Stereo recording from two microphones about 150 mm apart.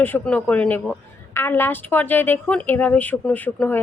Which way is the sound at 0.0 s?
10° left (ahead or behind).